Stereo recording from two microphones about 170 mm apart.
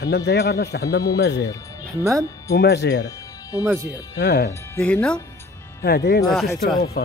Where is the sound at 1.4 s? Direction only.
20° left (ahead or behind).